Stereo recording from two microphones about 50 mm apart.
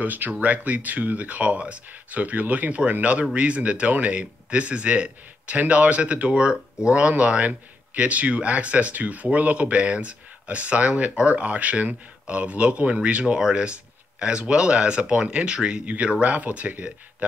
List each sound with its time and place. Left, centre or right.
0.0 s speech: right